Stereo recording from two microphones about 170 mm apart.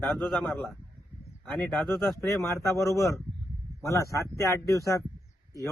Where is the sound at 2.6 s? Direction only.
20° left (ahead or behind).